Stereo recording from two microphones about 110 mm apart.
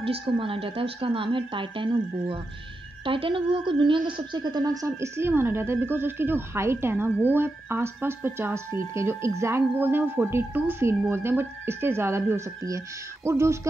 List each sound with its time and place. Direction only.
0.0 s a woman's voice: 55° right (ahead or behind); by 13.6 s 25° right (ahead or behind)